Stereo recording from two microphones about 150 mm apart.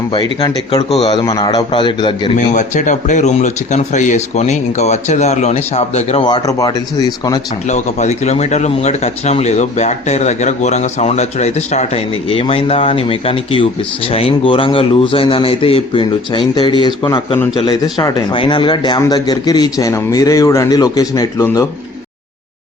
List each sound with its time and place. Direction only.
0.1 s a man's voice: 30° left (ahead or behind)
1.1 s a man's voice: 25° left (ahead or behind)
2.3 s speech: 55° left (ahead or behind)
6.2 s a man's voice: 25° left (ahead or behind)
7.7 s a man's voice: 50° left (ahead or behind); by 21.7 s 20° left (ahead or behind)